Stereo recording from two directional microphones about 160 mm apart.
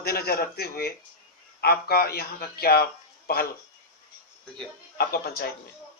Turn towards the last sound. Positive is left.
turn(degrees=70)  # may be behind; listen again after turning